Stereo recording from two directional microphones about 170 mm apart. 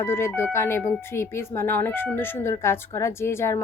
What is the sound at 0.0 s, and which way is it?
Speech, 15° left (ahead or behind).